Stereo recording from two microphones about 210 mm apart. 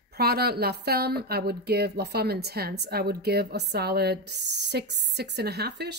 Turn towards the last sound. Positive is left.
turn(degrees=-55)  # may be behind; listen again after turning